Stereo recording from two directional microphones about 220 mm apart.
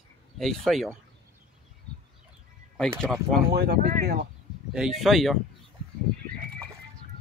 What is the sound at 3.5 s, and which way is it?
Speech, 45° right (ahead or behind).